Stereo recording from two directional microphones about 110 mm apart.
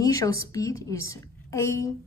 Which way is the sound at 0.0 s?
30° left (ahead or behind).